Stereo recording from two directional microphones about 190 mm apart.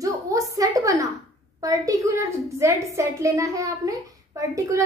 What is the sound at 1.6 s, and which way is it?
A woman's voice, 20° right (ahead or behind).